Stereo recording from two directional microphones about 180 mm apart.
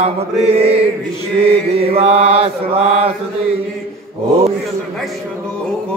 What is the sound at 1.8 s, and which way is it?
Mantra, 35° right (ahead or behind).